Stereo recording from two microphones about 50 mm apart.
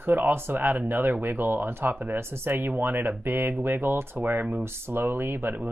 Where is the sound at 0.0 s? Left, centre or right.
Right.